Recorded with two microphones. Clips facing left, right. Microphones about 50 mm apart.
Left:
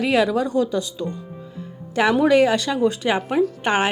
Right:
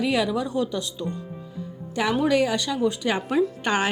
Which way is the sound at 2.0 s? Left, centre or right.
Left.